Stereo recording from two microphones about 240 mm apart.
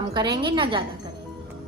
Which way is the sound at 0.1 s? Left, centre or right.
Centre.